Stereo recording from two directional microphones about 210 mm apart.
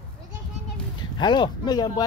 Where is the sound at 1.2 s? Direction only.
20° left (ahead or behind).